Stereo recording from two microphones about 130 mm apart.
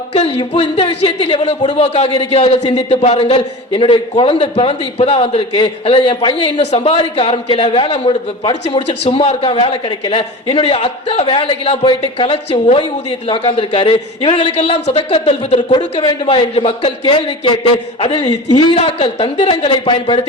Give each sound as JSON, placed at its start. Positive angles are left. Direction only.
{"t": 0.1, "sound": "speech", "side_deg": 45}
{"t": 9.0, "sound": "speech", "side_deg": 50}
{"t": 16.2, "sound": "a man's voice", "side_deg": 45}
{"t": 18.8, "sound": "a man's voice", "side_deg": 50}